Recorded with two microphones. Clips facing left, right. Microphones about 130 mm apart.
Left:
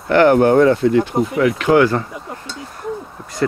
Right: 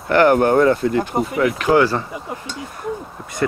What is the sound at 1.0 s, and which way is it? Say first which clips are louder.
Speech: left 3 dB; 5° right (ahead or behind).